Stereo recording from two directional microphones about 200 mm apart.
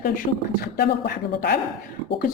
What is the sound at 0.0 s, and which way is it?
A man's voice, 50° left (ahead or behind).